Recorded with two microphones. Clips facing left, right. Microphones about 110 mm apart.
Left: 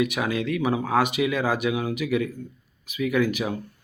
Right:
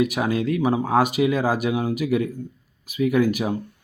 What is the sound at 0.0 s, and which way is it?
Speech, 40° right (ahead or behind).